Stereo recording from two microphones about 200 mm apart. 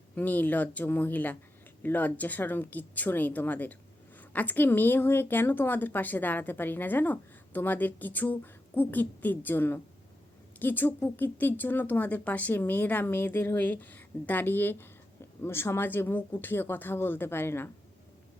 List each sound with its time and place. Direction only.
0.2 s a woman's voice: 10° left (ahead or behind)